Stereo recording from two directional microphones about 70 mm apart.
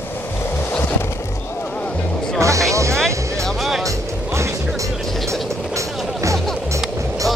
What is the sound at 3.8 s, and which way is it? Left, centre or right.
Music, right.